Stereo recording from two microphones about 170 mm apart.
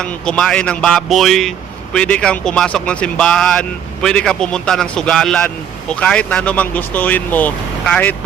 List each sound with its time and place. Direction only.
0.0 s speech: 5° left (ahead or behind)